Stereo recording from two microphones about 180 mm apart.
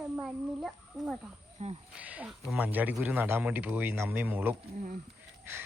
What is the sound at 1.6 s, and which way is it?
Speech, 35° right (ahead or behind).